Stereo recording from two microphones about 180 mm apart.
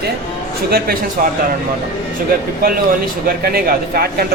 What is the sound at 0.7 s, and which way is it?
Speech, 55° right (ahead or behind).